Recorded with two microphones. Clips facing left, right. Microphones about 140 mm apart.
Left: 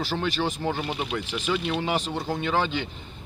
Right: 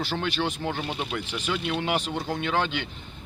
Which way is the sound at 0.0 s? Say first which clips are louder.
Left 1 dB; centre (ahead or behind).